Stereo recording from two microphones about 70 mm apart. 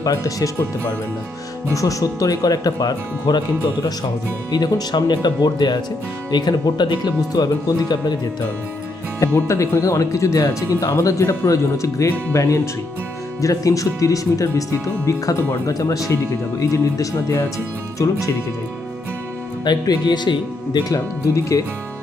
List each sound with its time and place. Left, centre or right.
0.0 s speech: left
1.7 s speech: left
4.9 s speech: left
7.9 s speech: left
9.5 s speech: left
13.4 s speech: left
19.6 s speech: left
20.9 s speech: left